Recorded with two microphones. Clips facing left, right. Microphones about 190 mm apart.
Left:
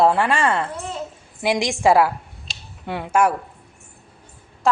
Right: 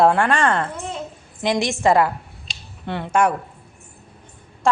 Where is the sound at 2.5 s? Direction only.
10° left (ahead or behind).